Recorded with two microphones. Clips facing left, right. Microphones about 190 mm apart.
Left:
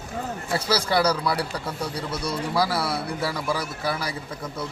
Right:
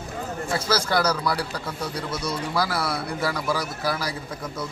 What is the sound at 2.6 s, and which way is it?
A man's voice, centre (ahead or behind).